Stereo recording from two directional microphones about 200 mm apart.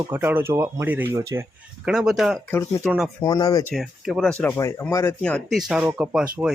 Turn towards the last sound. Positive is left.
turn(degrees=-5)  # may be behind; listen again after turning